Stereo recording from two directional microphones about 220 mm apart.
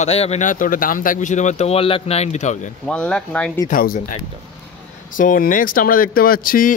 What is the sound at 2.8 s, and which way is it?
Speech, 5° left (ahead or behind).